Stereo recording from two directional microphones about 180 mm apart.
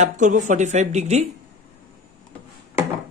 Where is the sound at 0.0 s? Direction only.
45° right (ahead or behind).